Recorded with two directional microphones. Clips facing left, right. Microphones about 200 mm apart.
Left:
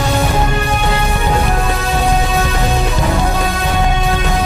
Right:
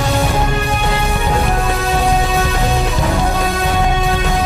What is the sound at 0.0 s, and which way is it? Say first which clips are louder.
Music: left 1 dB; centre (ahead or behind).